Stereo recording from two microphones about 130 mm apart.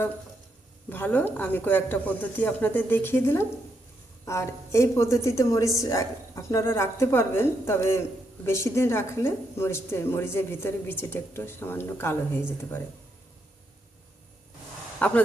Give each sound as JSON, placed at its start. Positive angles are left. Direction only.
{"t": 0.9, "sound": "speech", "side_deg": 15}
{"t": 14.9, "sound": "speech", "side_deg": 10}